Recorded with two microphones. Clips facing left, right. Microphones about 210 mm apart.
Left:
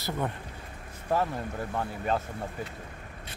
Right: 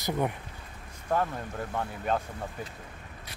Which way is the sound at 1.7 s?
5° left (ahead or behind).